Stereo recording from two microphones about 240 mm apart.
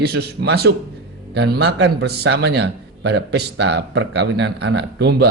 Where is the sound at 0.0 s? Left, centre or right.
Right.